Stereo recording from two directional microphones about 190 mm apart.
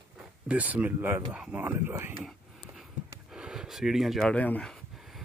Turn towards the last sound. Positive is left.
turn(degrees=5)  # may be behind; listen again after turning